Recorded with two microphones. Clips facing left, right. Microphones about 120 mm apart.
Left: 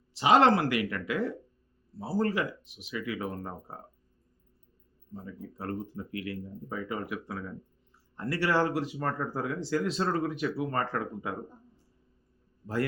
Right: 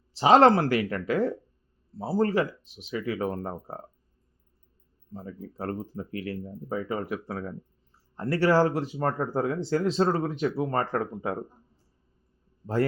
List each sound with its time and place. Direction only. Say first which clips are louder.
0.2 s speech: right 4 dB; 30° right (ahead or behind)
5.1 s speech: right 3 dB; 30° right (ahead or behind)